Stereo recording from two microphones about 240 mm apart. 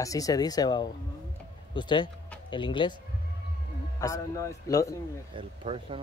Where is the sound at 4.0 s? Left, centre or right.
Centre.